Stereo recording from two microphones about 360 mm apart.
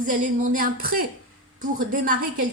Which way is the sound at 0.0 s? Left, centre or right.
Right.